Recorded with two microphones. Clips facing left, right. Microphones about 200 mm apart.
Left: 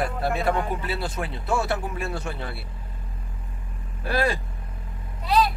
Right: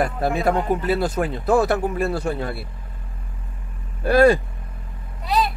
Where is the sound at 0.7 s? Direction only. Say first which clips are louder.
Right 8 dB; 45° right (ahead or behind).